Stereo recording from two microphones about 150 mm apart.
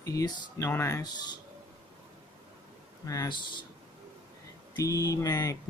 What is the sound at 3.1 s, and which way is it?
Speech, 25° left (ahead or behind).